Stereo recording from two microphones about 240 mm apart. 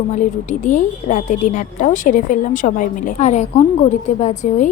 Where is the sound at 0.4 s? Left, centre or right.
Left.